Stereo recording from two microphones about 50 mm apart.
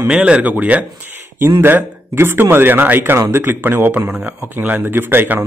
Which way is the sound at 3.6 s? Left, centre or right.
Right.